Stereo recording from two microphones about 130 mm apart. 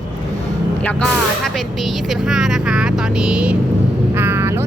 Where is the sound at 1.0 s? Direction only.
Centre (ahead or behind).